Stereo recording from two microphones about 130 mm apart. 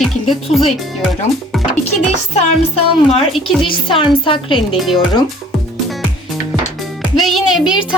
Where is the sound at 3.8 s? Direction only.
40° left (ahead or behind).